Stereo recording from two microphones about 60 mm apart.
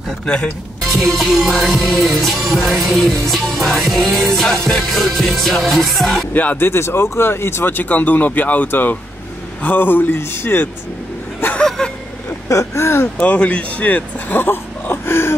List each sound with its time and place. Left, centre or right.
0.3 s speech: centre
0.9 s music: centre
6.3 s speech: left
6.7 s speech: left
11.6 s vehicle: centre
12.4 s speech: left
13.2 s speech: centre; by 15.3 s left